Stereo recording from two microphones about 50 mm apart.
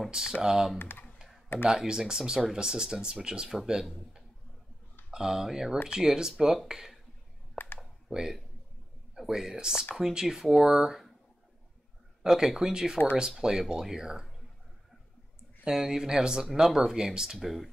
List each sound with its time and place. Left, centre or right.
0.1 s speech: centre
0.7 s speech: left
1.1 s computer keyboard: centre
1.7 s speech: centre
5.1 s speech: centre
7.6 s a sound: left
8.1 s speech: centre
12.2 s speech: centre
15.6 s speech: centre